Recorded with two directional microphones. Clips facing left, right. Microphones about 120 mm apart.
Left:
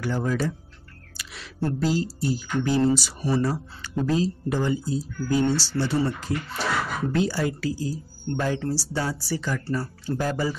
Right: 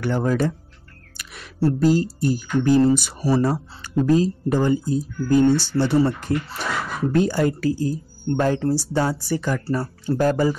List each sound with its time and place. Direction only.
0.0 s speech: 55° right (ahead or behind)
1.1 s a sound: 50° right (ahead or behind)
1.8 s speech: 50° right (ahead or behind)
3.2 s speech: 35° right (ahead or behind)